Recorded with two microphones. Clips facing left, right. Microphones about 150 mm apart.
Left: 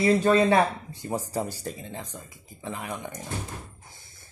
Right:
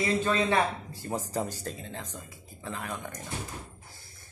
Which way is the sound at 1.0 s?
10° left (ahead or behind).